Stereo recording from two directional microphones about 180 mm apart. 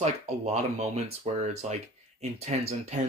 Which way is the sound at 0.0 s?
35° right (ahead or behind).